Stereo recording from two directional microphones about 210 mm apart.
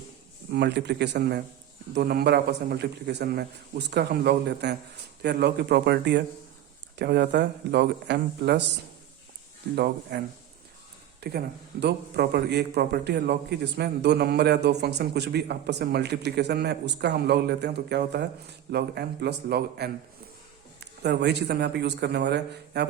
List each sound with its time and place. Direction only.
0.5 s a man's voice: 55° right (ahead or behind)
9.7 s a man's voice: 50° right (ahead or behind)